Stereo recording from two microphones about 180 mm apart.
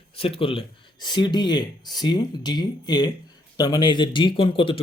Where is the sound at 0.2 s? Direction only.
30° left (ahead or behind).